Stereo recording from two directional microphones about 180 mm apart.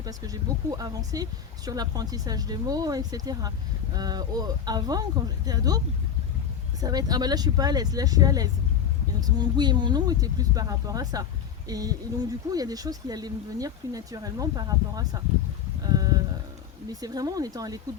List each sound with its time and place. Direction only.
0.0 s speech: 20° right (ahead or behind)
6.8 s speech: 20° right (ahead or behind)
16.0 s a sound: 20° right (ahead or behind)
16.9 s speech: 20° right (ahead or behind)